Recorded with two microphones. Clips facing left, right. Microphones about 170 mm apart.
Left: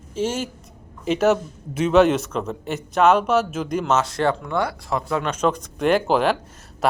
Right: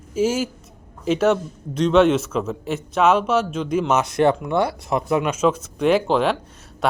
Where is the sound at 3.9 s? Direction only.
20° right (ahead or behind).